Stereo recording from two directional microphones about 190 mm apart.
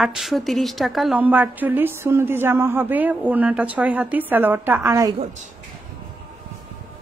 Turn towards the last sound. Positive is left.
turn(degrees=-40)  # may be behind; listen again after turning